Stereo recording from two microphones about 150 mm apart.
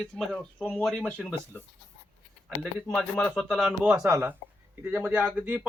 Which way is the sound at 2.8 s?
5° left (ahead or behind).